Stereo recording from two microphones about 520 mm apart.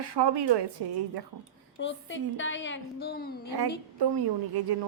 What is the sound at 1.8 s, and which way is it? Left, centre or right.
A woman's voice, left.